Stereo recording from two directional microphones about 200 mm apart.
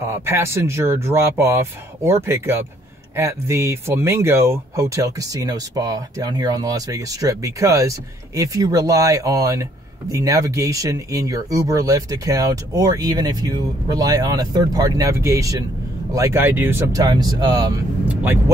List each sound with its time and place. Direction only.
0.0 s speech: 10° right (ahead or behind)
18.0 s vehicle: 10° right (ahead or behind)